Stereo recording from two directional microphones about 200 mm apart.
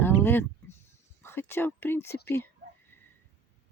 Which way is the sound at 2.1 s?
55° left (ahead or behind).